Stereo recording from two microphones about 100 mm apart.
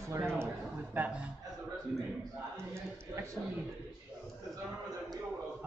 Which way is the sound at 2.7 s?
30° right (ahead or behind).